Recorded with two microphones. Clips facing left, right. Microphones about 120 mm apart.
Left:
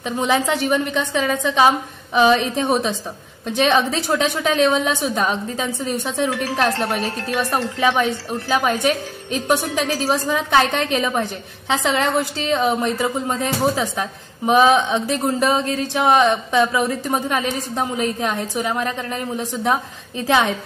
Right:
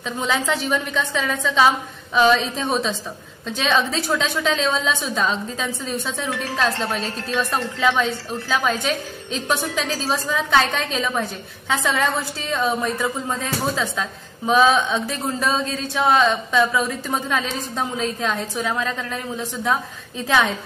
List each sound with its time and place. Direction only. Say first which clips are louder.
0.0 s a woman's voice: left 4 dB; 15° left (ahead or behind)
7.0 s speech: left 3 dB; 70° left (ahead or behind)
7.3 s a woman's voice: left 1 dB; 15° left (ahead or behind)
11.9 s a woman's voice: left 4 dB; 15° left (ahead or behind)